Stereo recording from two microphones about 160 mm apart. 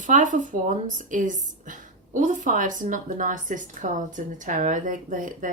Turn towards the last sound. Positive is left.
turn(degrees=-55)  # may be behind; listen again after turning